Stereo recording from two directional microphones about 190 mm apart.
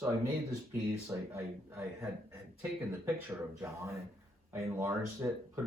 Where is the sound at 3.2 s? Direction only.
15° right (ahead or behind).